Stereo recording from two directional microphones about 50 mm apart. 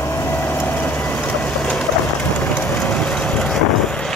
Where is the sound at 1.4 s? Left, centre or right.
Centre.